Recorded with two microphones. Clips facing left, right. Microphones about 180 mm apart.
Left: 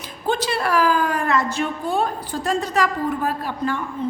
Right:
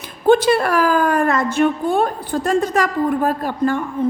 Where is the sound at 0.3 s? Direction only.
55° right (ahead or behind).